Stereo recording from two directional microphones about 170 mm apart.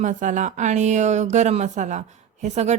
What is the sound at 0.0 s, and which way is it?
A woman's voice, 45° right (ahead or behind).